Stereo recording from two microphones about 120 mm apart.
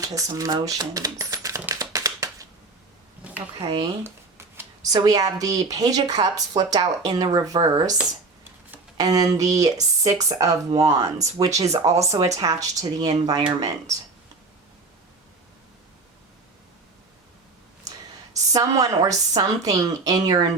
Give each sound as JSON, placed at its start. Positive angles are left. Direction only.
{"t": 0.0, "sound": "speech", "side_deg": -30}
{"t": 1.7, "sound": "a sound", "side_deg": -30}
{"t": 3.2, "sound": "a sound", "side_deg": -10}
{"t": 3.6, "sound": "speech", "side_deg": -50}
{"t": 4.0, "sound": "scissors", "side_deg": -20}
{"t": 4.8, "sound": "a woman's voice", "side_deg": -30}
{"t": 9.0, "sound": "speech", "side_deg": -30}
{"t": 18.5, "sound": "a woman's voice", "side_deg": -30}